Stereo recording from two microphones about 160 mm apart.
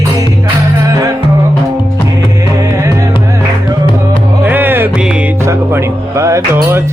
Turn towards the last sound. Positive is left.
turn(degrees=-15)  # may be behind; listen again after turning